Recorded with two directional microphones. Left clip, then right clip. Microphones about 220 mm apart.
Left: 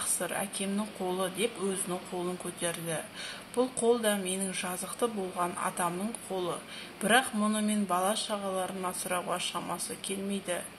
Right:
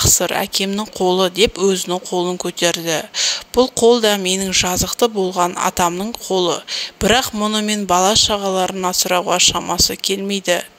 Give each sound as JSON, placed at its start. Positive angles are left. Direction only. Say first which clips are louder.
{"t": 0.0, "sound": "speech", "louder": "right 17 dB", "side_deg": -45}